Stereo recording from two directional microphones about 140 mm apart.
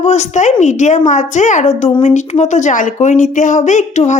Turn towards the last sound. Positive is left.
turn(degrees=60)  # may be behind; listen again after turning